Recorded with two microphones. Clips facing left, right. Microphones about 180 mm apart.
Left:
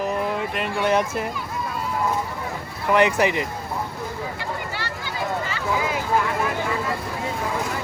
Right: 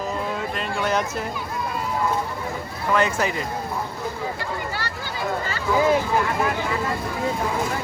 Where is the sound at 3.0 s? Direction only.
70° left (ahead or behind).